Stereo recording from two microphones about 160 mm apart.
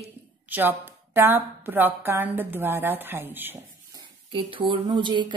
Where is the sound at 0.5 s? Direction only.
15° right (ahead or behind).